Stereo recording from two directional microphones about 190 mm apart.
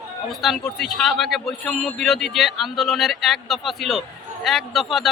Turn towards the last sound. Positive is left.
turn(degrees=0)  # may be behind; listen again after turning